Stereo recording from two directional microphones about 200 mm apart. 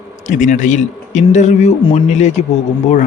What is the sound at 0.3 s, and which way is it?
A man's voice, 40° left (ahead or behind).